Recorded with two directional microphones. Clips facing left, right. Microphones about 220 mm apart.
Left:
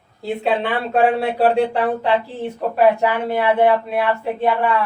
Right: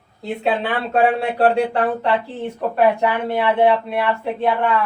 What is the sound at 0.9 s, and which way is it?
Speech, centre (ahead or behind).